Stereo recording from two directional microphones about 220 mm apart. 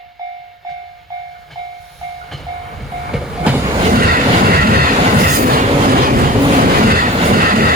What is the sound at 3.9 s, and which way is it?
Train, 40° right (ahead or behind).